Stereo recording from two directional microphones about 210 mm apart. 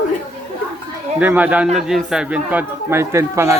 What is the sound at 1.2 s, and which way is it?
Speech, 5° right (ahead or behind).